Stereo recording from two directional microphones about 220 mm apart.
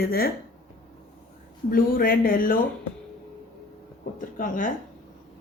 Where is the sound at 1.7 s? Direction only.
40° left (ahead or behind).